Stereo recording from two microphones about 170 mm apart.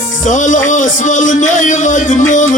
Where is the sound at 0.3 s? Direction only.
45° left (ahead or behind).